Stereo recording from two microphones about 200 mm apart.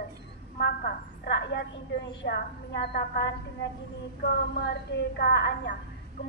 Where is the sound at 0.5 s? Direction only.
55° left (ahead or behind).